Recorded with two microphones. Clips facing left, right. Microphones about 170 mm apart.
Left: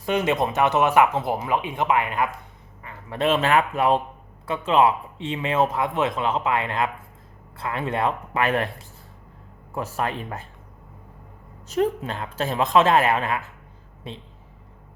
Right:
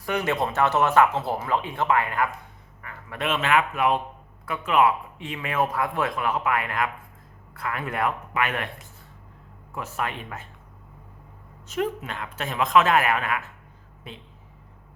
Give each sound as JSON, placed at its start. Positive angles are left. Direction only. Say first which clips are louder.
{"t": 0.0, "sound": "speech", "louder": "left 3 dB", "side_deg": 20}
{"t": 2.8, "sound": "a man's voice", "louder": "left 6 dB", "side_deg": 30}
{"t": 11.7, "sound": "a woman's voice", "louder": "left 5 dB", "side_deg": 35}